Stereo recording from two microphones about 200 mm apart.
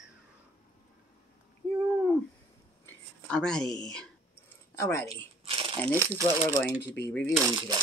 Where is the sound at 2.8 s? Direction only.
5° left (ahead or behind).